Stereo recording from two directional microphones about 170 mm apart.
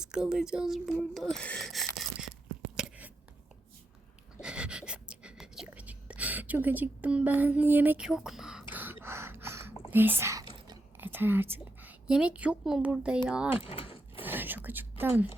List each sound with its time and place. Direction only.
0.0 s speech: 5° right (ahead or behind)
2.8 s chewing: 5° right (ahead or behind)
4.4 s whispering: 5° right (ahead or behind)
8.7 s gasp: 10° right (ahead or behind)
9.9 s a woman's voice: 10° right (ahead or behind)
13.6 s speech: 35° left (ahead or behind)
14.2 s whispering: 10° right (ahead or behind)